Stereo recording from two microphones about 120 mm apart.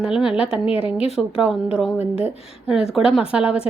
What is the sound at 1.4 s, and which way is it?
A woman's voice, 5° right (ahead or behind).